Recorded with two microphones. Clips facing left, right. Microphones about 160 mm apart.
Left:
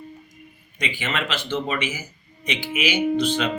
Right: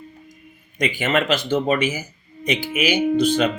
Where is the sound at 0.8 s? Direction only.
45° right (ahead or behind).